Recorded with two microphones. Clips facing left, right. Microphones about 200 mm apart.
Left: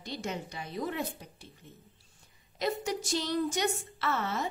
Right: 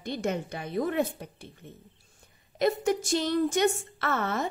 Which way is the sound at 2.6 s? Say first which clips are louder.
Right 7 dB; 55° right (ahead or behind).